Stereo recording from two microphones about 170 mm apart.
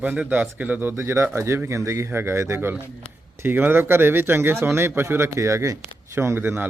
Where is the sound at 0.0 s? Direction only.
10° right (ahead or behind).